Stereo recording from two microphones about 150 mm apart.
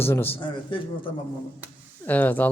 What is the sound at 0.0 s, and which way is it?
Speech, 15° left (ahead or behind).